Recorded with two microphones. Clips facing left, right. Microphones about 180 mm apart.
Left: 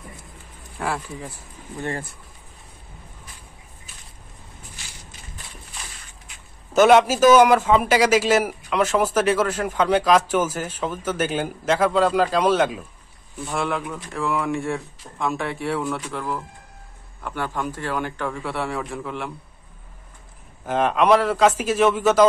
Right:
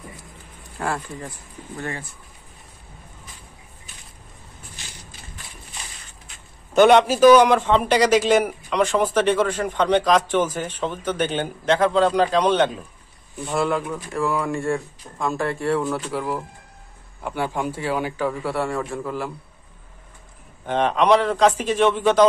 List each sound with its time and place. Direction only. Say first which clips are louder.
0.7 s a man's voice: even; centre (ahead or behind)
6.7 s a man's voice: even; 5° left (ahead or behind)
20.6 s a man's voice: even; 5° left (ahead or behind)